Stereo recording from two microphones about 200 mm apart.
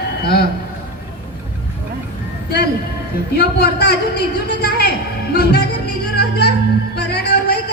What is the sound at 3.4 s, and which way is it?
A woman's voice, 55° left (ahead or behind).